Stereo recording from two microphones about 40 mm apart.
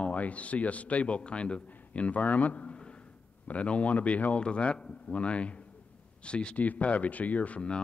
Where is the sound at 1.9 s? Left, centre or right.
Left.